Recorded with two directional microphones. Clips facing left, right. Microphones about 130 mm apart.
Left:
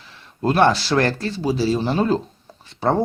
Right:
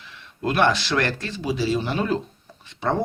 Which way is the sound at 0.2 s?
35° left (ahead or behind).